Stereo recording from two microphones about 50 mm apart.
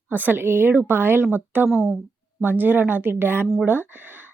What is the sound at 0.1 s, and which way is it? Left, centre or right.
Speech, right.